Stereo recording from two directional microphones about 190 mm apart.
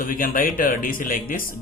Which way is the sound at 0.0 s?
45° left (ahead or behind).